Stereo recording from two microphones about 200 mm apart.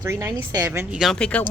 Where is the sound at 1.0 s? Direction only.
5° left (ahead or behind).